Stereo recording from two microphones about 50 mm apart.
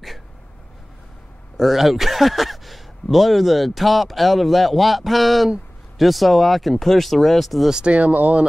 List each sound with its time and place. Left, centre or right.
1.6 s speech: centre
7.7 s speech: right